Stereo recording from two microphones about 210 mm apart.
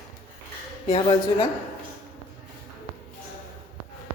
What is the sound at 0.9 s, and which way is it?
Speech, 25° left (ahead or behind).